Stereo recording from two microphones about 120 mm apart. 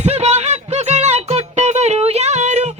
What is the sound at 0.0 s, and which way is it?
Music, 65° right (ahead or behind).